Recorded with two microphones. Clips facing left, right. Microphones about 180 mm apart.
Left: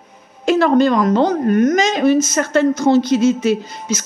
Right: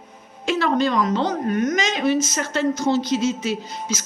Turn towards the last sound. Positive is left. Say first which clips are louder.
# left 7 dB
turn(degrees=55)  # may be behind; listen again after turning